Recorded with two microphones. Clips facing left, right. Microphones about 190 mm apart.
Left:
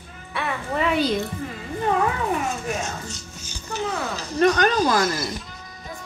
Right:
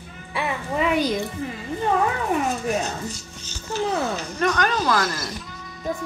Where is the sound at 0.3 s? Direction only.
10° right (ahead or behind).